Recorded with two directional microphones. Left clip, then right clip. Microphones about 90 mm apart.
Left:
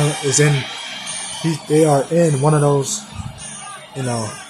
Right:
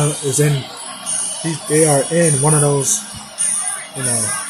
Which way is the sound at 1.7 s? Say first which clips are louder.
Left 1 dB; 20° left (ahead or behind).